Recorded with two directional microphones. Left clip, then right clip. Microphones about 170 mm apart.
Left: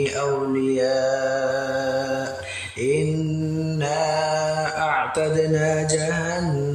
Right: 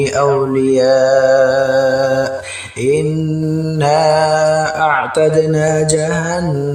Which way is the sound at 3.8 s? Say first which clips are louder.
Right 11 dB; 35° right (ahead or behind).